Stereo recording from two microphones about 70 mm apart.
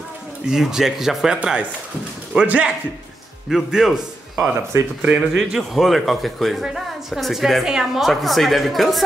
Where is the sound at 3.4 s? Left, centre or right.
Centre.